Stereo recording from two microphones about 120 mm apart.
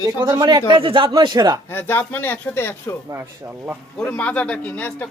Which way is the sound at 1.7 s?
20° left (ahead or behind).